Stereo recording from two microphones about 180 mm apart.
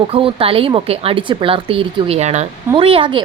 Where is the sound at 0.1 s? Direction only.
30° right (ahead or behind).